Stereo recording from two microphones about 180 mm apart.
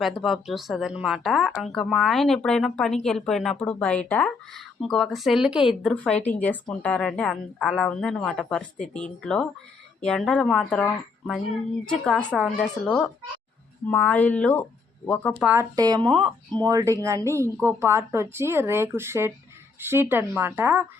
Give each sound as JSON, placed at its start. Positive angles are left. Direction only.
{"t": 0.0, "sound": "speech", "side_deg": 0}
{"t": 15.4, "sound": "speech", "side_deg": -5}
{"t": 15.7, "sound": "speech", "side_deg": -20}